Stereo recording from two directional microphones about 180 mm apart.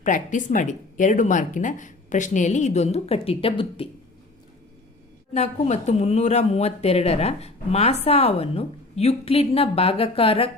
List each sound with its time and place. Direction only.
0.0 s speech: 45° left (ahead or behind)
5.3 s speech: 40° left (ahead or behind)